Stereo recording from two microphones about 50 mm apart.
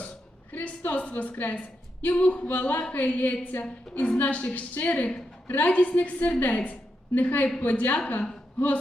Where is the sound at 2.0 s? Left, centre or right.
Left.